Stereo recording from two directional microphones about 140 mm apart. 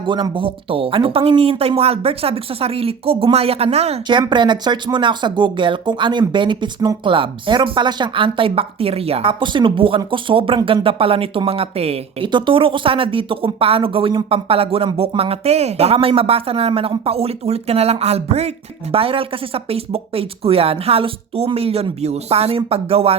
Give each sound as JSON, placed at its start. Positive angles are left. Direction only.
{"t": 0.0, "sound": "speech", "side_deg": -35}
{"t": 4.0, "sound": "speech", "side_deg": -35}